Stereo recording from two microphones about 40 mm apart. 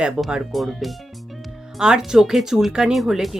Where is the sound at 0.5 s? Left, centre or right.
Centre.